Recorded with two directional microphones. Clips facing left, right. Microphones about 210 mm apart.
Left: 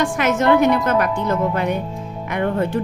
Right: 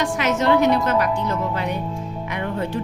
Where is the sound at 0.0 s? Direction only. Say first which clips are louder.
Left 3 dB; 50° left (ahead or behind).